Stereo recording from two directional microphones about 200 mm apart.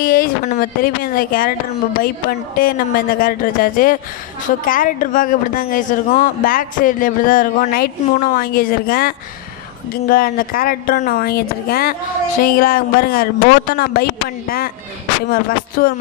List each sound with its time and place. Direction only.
0.0 s a woman's voice: 45° left (ahead or behind)